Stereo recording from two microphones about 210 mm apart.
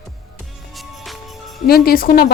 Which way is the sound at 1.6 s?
45° left (ahead or behind).